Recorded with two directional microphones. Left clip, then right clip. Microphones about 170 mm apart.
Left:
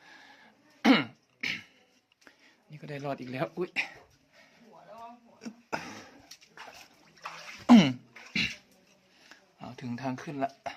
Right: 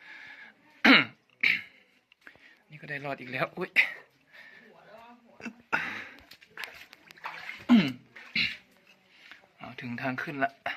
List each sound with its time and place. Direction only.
0.1 s throat clearing: 30° left (ahead or behind)
2.6 s speech: 35° left (ahead or behind)
3.5 s speech: centre (ahead or behind)
5.4 s a sound: 10° left (ahead or behind)
7.7 s cough: 55° left (ahead or behind)
9.3 s a sound: 30° left (ahead or behind)
10.0 s speech: 15° left (ahead or behind)